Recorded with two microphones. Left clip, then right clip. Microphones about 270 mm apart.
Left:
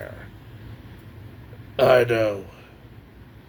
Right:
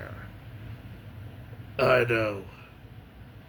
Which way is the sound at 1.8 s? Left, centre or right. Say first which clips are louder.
Left 6 dB; centre.